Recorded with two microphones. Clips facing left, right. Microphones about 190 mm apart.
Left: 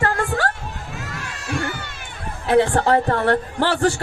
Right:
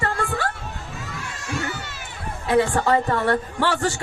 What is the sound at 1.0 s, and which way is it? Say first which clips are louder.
Crowd: left 2 dB; 75° left (ahead or behind).